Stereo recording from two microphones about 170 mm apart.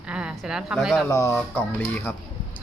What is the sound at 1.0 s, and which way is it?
Speech, 15° left (ahead or behind).